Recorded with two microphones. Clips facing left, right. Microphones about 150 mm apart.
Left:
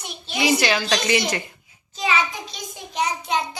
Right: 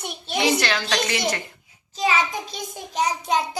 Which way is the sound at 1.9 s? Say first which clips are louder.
Right 1 dB; 35° right (ahead or behind).